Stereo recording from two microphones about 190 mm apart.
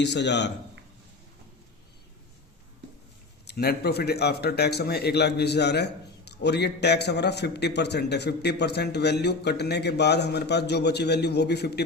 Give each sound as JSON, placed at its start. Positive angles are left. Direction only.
{"t": 0.0, "sound": "speech", "side_deg": 65}
{"t": 3.4, "sound": "speech", "side_deg": 60}